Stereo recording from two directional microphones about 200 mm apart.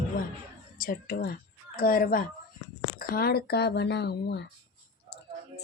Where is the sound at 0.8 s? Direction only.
45° left (ahead or behind).